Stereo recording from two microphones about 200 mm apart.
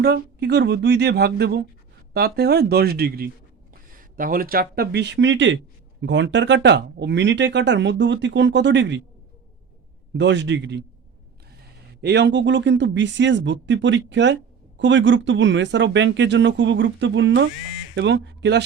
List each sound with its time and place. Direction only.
0.0 s speech: 55° right (ahead or behind)
10.2 s speech: 60° right (ahead or behind)
12.0 s speech: 60° right (ahead or behind)